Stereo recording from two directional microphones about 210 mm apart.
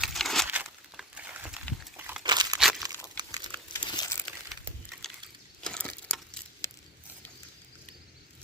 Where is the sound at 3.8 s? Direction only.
20° left (ahead or behind).